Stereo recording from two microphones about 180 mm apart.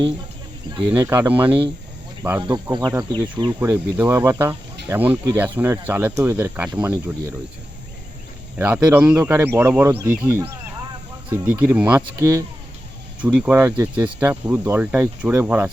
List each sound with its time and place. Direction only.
0.8 s speech: 10° right (ahead or behind)
3.6 s speech: 10° right (ahead or behind)
8.5 s speech: 10° right (ahead or behind)